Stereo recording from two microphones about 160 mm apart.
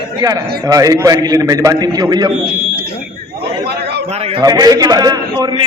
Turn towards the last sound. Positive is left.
turn(degrees=-25)  # may be behind; listen again after turning